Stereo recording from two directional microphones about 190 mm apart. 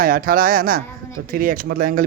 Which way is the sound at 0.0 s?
50° right (ahead or behind).